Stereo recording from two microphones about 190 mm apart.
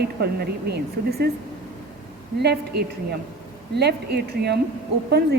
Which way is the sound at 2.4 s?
60° right (ahead or behind).